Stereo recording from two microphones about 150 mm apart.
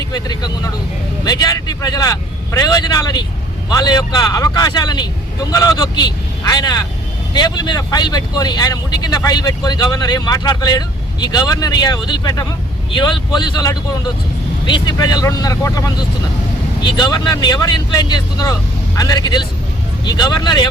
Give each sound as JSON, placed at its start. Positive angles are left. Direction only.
{"t": 0.0, "sound": "speech", "side_deg": 25}